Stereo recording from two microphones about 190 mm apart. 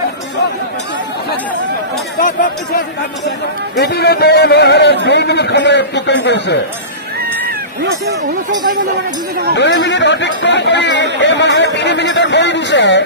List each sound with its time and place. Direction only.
3.8 s speech: 60° left (ahead or behind)
8.3 s speech: 45° right (ahead or behind)
9.6 s speech: 65° left (ahead or behind)